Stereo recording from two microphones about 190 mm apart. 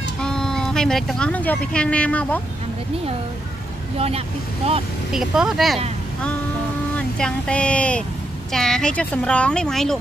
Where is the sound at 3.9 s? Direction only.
30° right (ahead or behind).